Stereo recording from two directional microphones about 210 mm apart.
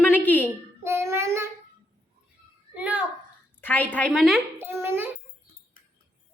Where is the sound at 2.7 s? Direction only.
5° right (ahead or behind).